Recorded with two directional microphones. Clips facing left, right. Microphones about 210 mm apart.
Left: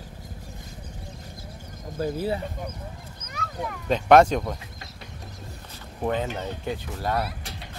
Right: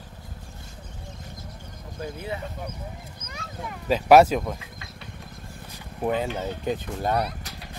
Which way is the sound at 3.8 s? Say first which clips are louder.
Right 1 dB; 5° right (ahead or behind).